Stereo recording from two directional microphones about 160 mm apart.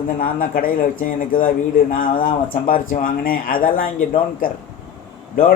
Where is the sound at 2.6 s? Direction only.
60° left (ahead or behind).